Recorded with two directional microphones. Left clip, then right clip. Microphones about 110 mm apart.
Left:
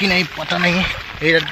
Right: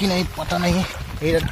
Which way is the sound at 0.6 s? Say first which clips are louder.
Left 6 dB; 15° right (ahead or behind).